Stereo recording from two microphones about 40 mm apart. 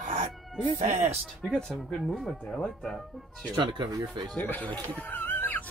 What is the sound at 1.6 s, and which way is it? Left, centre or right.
Speech, centre.